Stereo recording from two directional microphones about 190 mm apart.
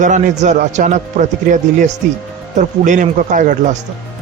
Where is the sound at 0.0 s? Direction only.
40° right (ahead or behind).